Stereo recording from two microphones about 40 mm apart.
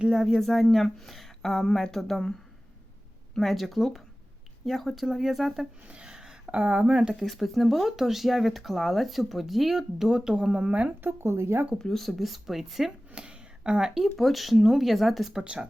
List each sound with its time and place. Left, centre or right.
0.1 s speech: centre
0.3 s speech: centre
3.3 s speech: centre
6.1 s a sound: centre
6.5 s speech: right
7.3 s speech: centre
11.0 s speech: right
11.8 s speech: centre
13.1 s a sound: right
14.0 s speech: centre